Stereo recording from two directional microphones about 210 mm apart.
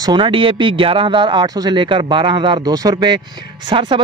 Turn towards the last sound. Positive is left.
turn(degrees=-25)  # may be behind; listen again after turning